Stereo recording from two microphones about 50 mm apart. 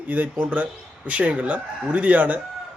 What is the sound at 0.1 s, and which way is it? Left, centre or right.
Speech, right.